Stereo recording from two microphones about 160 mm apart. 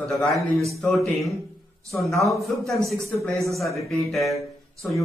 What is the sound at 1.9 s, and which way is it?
Speech, 20° left (ahead or behind).